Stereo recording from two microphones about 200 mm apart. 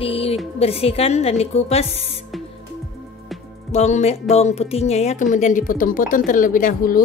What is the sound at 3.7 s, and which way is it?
A woman's voice, 35° left (ahead or behind).